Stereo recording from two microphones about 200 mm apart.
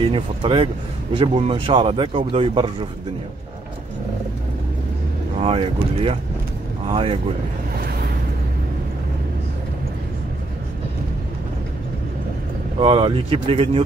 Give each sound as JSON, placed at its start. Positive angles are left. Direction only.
{"t": 0.0, "sound": "speech", "side_deg": -25}
{"t": 5.4, "sound": "speech", "side_deg": -30}
{"t": 12.7, "sound": "speech", "side_deg": -30}